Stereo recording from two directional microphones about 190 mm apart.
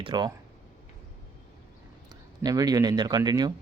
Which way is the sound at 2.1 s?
20° right (ahead or behind).